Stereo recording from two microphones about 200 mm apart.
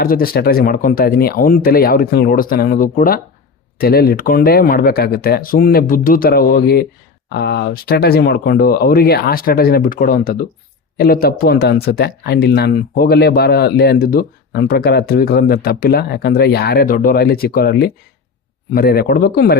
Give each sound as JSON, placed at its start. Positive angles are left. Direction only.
{"t": 0.0, "sound": "speech", "side_deg": 45}